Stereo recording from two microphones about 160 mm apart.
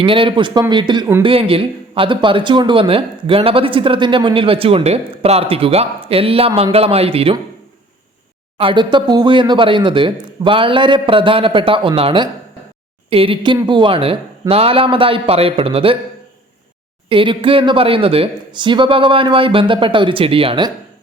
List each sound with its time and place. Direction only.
0.0 s speech: 35° right (ahead or behind)
8.5 s speech: 30° right (ahead or behind)
17.1 s speech: 30° right (ahead or behind)